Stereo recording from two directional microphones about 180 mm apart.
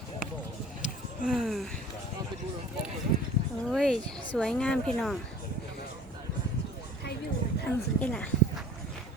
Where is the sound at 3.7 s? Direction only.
Centre (ahead or behind).